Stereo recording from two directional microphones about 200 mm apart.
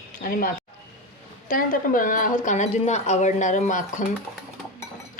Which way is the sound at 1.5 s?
45° left (ahead or behind).